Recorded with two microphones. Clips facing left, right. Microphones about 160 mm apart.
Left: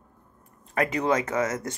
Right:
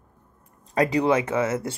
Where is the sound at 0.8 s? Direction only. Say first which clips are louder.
Right 4 dB; 30° right (ahead or behind).